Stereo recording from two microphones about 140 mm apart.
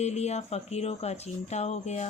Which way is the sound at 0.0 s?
50° left (ahead or behind).